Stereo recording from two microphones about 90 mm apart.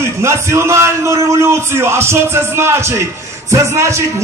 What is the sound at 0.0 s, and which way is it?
A man's voice, 30° right (ahead or behind).